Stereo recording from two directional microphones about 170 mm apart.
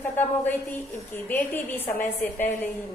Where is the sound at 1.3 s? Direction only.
10° left (ahead or behind).